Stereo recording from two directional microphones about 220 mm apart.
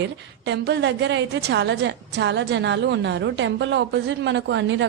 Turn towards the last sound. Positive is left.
turn(degrees=-55)  # may be behind; listen again after turning